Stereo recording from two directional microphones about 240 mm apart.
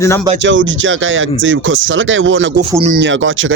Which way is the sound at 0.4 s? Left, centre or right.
Right.